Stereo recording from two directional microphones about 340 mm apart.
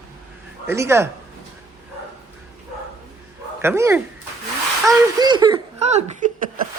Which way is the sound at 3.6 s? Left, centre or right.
Centre.